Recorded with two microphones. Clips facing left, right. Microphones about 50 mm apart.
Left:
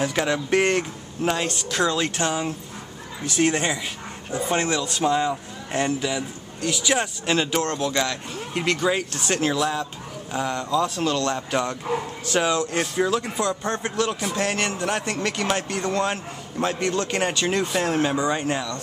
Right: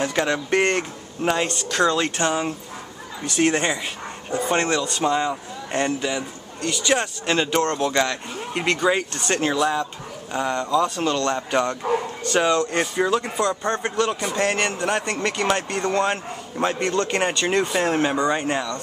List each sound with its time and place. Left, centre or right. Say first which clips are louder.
0.0 s a man's voice: right 1 dB; centre
7.9 s a man's voice: right 3 dB; centre